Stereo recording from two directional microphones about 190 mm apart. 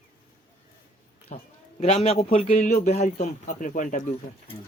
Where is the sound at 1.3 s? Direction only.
40° left (ahead or behind).